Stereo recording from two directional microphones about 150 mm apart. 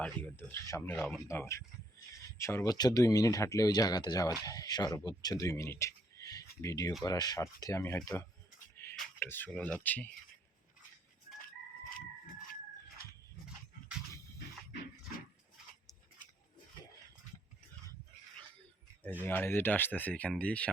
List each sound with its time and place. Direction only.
0.0 s speech: 10° left (ahead or behind)
0.9 s speech: centre (ahead or behind)
1.3 s speech: 20° left (ahead or behind)
19.2 s speech: 10° left (ahead or behind)